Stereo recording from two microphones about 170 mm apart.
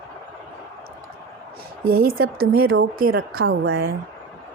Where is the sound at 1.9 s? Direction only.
60° right (ahead or behind); by 3.9 s 80° right.